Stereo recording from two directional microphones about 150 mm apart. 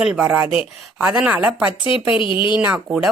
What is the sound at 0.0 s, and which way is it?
A woman's voice, 5° right (ahead or behind).